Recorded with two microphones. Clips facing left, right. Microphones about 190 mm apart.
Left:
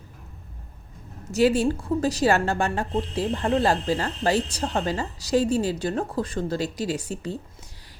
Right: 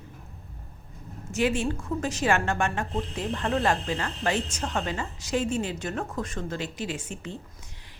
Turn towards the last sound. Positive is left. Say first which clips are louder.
# left 1 dB
turn(degrees=35)  # may be behind; listen again after turning